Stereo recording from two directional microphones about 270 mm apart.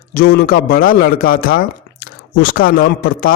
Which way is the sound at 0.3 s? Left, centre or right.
Left.